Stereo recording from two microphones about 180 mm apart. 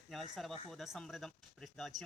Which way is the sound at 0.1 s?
Centre (ahead or behind).